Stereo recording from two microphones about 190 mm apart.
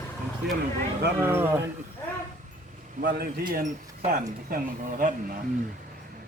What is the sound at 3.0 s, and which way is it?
A man's voice, 55° right (ahead or behind).